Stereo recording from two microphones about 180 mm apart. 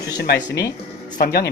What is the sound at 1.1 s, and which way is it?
Speech, 60° left (ahead or behind).